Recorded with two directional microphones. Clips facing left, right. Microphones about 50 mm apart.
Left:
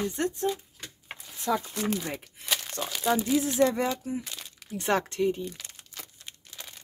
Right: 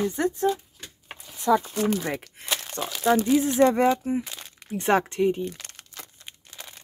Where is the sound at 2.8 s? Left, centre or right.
Right.